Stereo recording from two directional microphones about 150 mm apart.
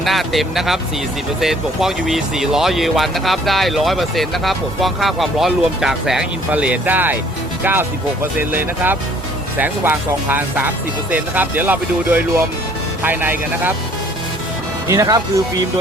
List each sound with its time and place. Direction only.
0.0 s speech: centre (ahead or behind)
14.8 s speech: 20° right (ahead or behind)